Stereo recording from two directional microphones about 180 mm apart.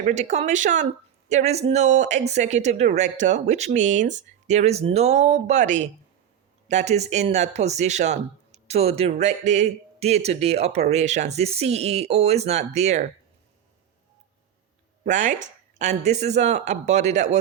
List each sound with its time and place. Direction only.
0.0 s speech: 40° right (ahead or behind)
15.0 s speech: 45° right (ahead or behind)